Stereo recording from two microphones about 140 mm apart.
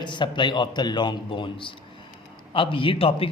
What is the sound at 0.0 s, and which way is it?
A man's voice, 35° left (ahead or behind).